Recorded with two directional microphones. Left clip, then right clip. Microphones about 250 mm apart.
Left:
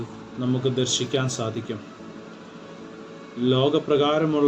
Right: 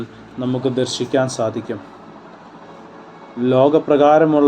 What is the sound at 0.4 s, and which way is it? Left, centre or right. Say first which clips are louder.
Speech: right 5 dB; right.